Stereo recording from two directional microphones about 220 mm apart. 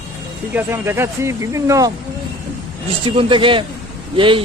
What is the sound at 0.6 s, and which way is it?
Speech, 10° right (ahead or behind).